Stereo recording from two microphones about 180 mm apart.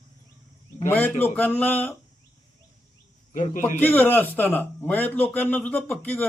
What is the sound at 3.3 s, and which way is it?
Speech, 45° left (ahead or behind).